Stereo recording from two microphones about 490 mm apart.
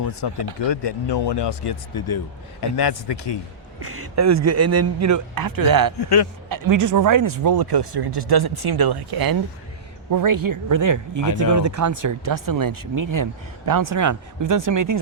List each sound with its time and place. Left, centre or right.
0.2 s a man's voice: left
3.8 s speech: right
6.0 s a man's voice: left
6.5 s speech: right